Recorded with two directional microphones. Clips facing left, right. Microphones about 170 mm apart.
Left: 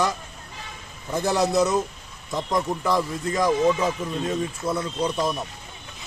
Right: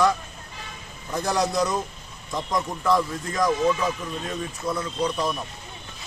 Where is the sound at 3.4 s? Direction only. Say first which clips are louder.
Left 1 dB; 20° left (ahead or behind).